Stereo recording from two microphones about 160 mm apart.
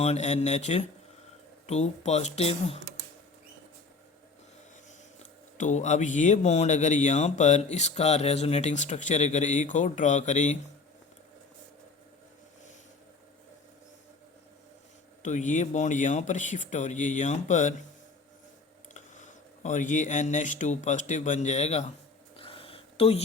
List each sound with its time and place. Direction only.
0.0 s speech: 45° left (ahead or behind)
4.9 s speech: 50° left (ahead or behind)
15.2 s speech: 50° left (ahead or behind)
18.9 s speech: 50° left (ahead or behind)
22.4 s a sound: 35° left (ahead or behind)